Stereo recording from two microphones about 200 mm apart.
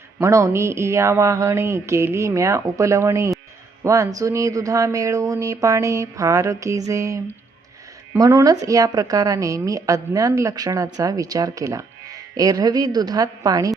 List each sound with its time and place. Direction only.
0.2 s a woman's voice: 15° right (ahead or behind)
8.2 s a woman's voice: 15° right (ahead or behind)